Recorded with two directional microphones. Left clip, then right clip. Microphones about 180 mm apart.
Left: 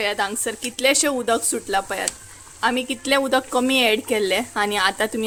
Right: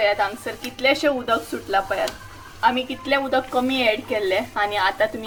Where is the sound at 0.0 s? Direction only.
90° left.